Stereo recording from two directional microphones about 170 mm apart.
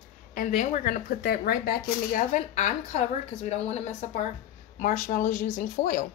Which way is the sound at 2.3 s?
45° left (ahead or behind).